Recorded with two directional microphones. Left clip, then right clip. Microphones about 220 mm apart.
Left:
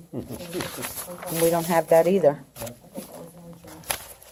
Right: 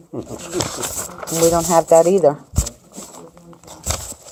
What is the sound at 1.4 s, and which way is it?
Speech, 15° right (ahead or behind).